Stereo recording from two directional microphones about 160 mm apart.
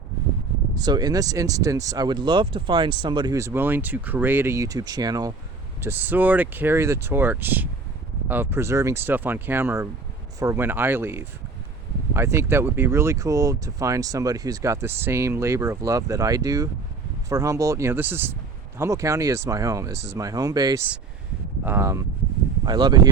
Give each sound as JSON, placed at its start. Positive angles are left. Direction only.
{"t": 0.8, "sound": "speech", "side_deg": -25}
{"t": 5.8, "sound": "speech", "side_deg": -15}